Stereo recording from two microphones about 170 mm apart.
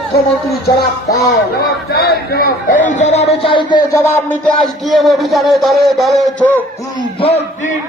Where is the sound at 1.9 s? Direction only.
65° left (ahead or behind); by 3.8 s 30° left (ahead or behind).